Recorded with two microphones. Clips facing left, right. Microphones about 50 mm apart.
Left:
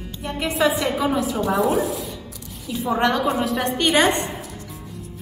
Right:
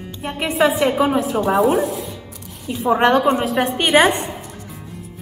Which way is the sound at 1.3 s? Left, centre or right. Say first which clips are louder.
Right 4 dB; right.